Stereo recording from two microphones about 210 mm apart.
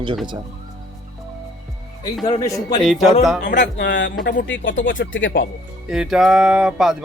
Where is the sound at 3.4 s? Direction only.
55° left (ahead or behind).